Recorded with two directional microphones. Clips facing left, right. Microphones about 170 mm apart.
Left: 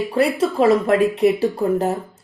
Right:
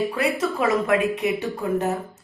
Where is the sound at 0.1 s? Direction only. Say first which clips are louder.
Left 5 dB; 30° left (ahead or behind).